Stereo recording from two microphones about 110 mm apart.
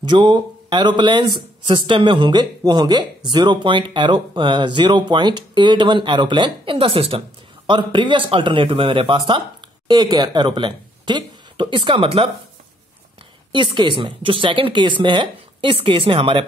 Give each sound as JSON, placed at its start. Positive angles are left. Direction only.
{"t": 0.0, "sound": "speech", "side_deg": -45}
{"t": 1.7, "sound": "speech", "side_deg": -50}
{"t": 13.5, "sound": "speech", "side_deg": -45}